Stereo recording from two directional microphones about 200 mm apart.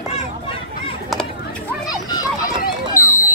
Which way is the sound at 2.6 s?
40° left (ahead or behind).